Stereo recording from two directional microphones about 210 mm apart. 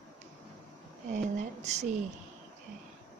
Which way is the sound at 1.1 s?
35° right (ahead or behind).